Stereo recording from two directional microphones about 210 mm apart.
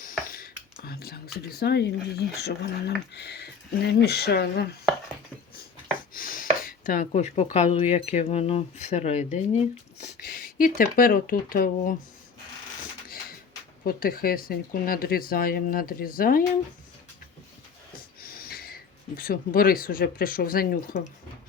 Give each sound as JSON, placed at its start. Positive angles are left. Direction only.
{"t": 0.3, "sound": "speech", "side_deg": 45}
{"t": 6.1, "sound": "a sound", "side_deg": 40}
{"t": 6.6, "sound": "speech", "side_deg": 40}
{"t": 10.0, "sound": "speech", "side_deg": 45}
{"t": 13.8, "sound": "speech", "side_deg": 45}
{"t": 18.2, "sound": "speech", "side_deg": 45}